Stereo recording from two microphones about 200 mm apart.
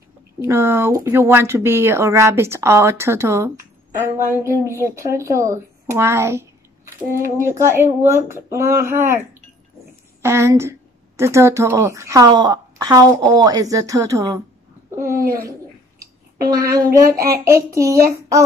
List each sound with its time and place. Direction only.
0.4 s a woman's voice: 15° right (ahead or behind)
10.2 s a woman's voice: 15° right (ahead or behind)
15.0 s a sound: 15° right (ahead or behind)
16.4 s a woman's voice: 15° right (ahead or behind)